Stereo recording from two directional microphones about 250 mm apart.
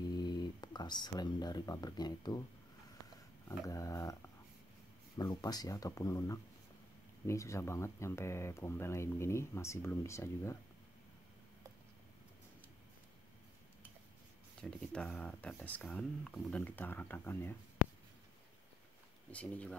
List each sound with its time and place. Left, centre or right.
0.1 s speech: centre
3.4 s speech: centre
14.6 s speech: centre
19.3 s speech: centre